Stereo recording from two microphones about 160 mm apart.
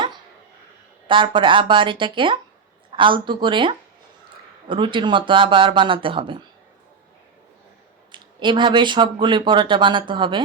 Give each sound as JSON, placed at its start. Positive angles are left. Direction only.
{"t": 1.0, "sound": "speech", "side_deg": -30}
{"t": 8.1, "sound": "speech", "side_deg": -30}